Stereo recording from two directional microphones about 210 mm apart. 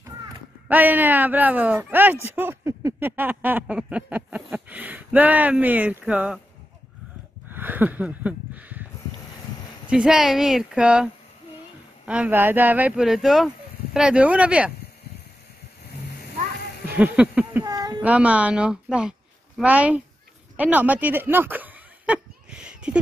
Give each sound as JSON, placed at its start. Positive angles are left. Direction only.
{"t": 0.7, "sound": "speech", "side_deg": -10}
{"t": 7.4, "sound": "snort", "side_deg": -10}
{"t": 9.8, "sound": "speech", "side_deg": -5}
{"t": 12.1, "sound": "speech", "side_deg": -5}
{"t": 16.9, "sound": "speech", "side_deg": -5}
{"t": 17.6, "sound": "a sound", "side_deg": -20}
{"t": 18.0, "sound": "a woman's voice", "side_deg": -5}
{"t": 20.5, "sound": "a sound", "side_deg": -5}